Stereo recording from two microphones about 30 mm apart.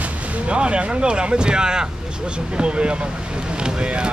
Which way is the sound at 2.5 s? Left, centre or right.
Right.